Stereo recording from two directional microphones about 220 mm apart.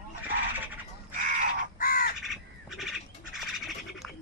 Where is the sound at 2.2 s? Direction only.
Centre (ahead or behind).